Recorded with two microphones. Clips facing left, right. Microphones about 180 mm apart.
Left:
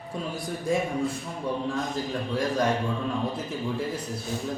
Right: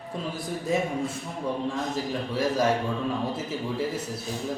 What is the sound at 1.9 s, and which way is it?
A man's voice, 5° right (ahead or behind).